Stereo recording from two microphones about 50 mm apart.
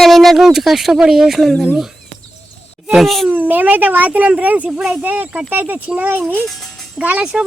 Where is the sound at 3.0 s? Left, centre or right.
Centre.